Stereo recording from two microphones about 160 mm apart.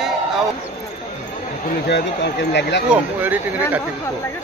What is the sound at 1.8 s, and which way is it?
Speech, 90° left.